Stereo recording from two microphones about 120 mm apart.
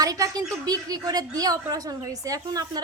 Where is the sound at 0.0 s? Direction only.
30° right (ahead or behind).